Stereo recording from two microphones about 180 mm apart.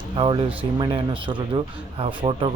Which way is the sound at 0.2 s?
30° right (ahead or behind).